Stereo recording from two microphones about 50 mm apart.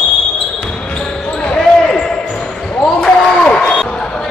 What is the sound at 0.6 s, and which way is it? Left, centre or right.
Basketball bounce, centre.